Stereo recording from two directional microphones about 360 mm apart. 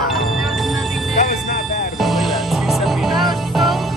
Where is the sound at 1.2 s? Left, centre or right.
Left.